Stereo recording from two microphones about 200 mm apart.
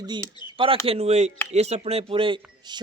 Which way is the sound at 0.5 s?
25° right (ahead or behind).